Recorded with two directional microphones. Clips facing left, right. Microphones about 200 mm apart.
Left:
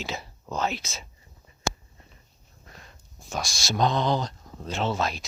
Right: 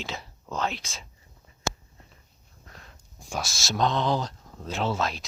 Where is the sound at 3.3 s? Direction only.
5° right (ahead or behind).